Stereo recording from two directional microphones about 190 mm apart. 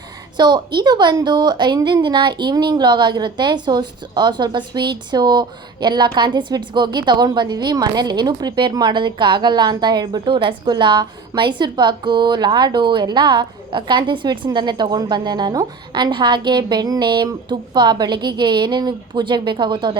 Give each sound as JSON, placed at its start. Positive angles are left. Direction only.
{"t": 0.3, "sound": "a woman's voice", "side_deg": -20}